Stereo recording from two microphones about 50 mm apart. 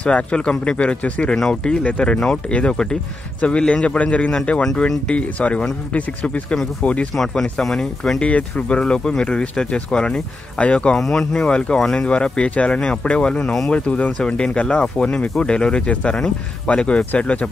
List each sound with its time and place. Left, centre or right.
0.0 s speech: left
1.3 s speech: centre
7.6 s speech: centre
8.2 s speech: left
11.0 s speech: centre
12.1 s speech: left